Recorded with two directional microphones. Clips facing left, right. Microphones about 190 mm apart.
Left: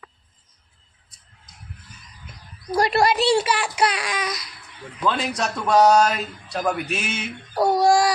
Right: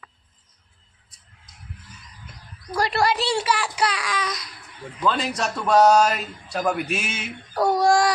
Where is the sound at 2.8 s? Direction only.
20° left (ahead or behind); by 7.3 s 5° right (ahead or behind).